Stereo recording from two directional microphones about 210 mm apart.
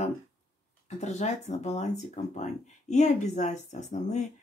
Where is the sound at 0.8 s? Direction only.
35° left (ahead or behind).